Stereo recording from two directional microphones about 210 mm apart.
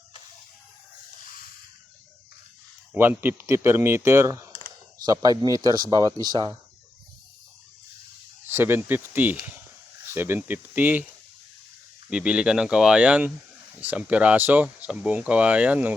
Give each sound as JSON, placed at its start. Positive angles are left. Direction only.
{"t": 2.9, "sound": "speech", "side_deg": -10}
{"t": 8.4, "sound": "speech", "side_deg": -10}
{"t": 12.1, "sound": "speech", "side_deg": -5}